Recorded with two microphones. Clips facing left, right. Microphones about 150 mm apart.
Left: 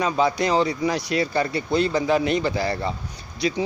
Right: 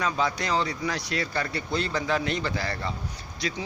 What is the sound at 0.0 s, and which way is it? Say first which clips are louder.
Speech: left 6 dB; 20° left (ahead or behind).